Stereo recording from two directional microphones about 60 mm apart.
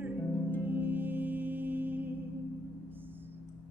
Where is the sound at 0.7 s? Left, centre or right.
Right.